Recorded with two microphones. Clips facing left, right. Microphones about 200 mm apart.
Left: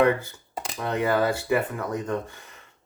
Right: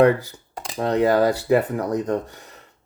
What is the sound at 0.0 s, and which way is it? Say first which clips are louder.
Speech: right 5 dB; 35° right (ahead or behind).